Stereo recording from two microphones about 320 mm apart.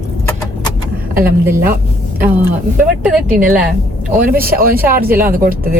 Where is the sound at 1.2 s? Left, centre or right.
Centre.